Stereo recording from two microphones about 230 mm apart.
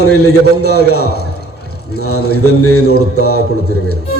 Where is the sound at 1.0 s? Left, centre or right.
Left.